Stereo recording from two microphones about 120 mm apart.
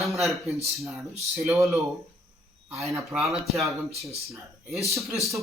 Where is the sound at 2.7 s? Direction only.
Centre (ahead or behind).